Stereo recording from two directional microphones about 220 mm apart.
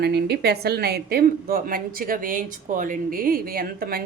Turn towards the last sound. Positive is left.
turn(degrees=-40)  # may be behind; listen again after turning